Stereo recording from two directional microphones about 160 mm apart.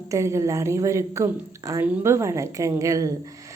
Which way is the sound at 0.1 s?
20° right (ahead or behind).